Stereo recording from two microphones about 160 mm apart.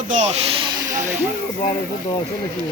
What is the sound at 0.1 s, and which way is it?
Speech, 45° right (ahead or behind).